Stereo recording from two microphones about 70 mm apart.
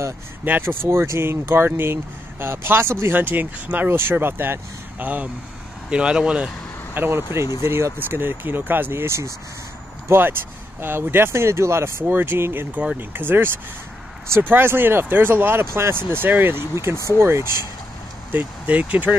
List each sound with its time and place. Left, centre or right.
0.5 s speech: right
5.9 s speech: centre
6.9 s speech: right
12.7 s speech: centre
13.1 s speech: right
18.3 s speech: right